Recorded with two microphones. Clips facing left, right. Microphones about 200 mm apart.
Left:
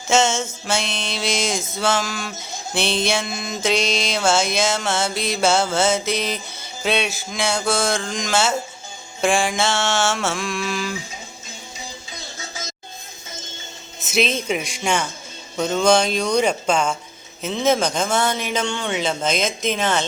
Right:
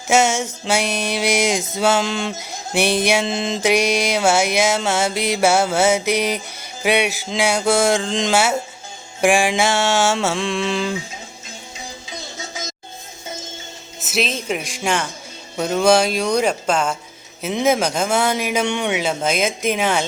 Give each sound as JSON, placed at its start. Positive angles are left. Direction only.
{"t": 0.1, "sound": "music", "side_deg": -15}
{"t": 2.0, "sound": "mantra", "side_deg": -25}
{"t": 2.4, "sound": "music", "side_deg": -10}
{"t": 3.2, "sound": "mantra", "side_deg": -25}
{"t": 3.6, "sound": "music", "side_deg": -15}
{"t": 8.3, "sound": "music", "side_deg": -15}
{"t": 10.3, "sound": "mantra", "side_deg": -25}
{"t": 14.0, "sound": "a man's voice", "side_deg": 0}
{"t": 15.5, "sound": "music", "side_deg": -5}